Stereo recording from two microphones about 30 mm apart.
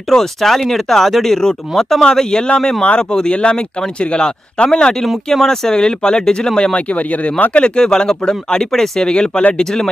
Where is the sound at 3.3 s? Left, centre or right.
Left.